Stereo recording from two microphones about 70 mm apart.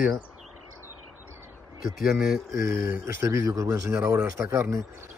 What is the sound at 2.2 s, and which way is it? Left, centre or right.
Speech, centre.